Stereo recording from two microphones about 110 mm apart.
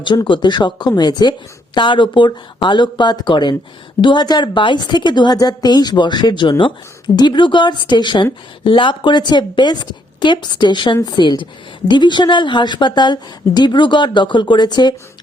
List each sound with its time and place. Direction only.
0.3 s a woman's voice: 45° left (ahead or behind)